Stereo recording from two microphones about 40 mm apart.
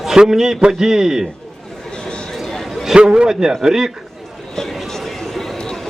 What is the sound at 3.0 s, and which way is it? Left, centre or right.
Speech, right.